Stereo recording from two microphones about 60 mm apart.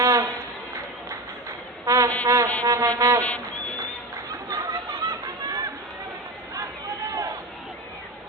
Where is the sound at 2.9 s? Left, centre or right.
Right.